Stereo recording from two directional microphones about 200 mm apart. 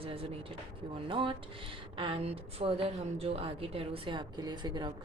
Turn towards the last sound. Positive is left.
turn(degrees=-20)  # may be behind; listen again after turning